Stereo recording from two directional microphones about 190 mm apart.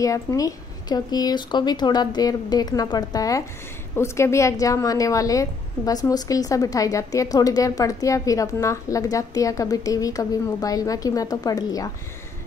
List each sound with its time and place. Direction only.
0.0 s a woman's voice: 15° left (ahead or behind)